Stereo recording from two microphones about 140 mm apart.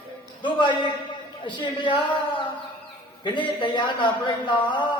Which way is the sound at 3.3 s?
35° left (ahead or behind).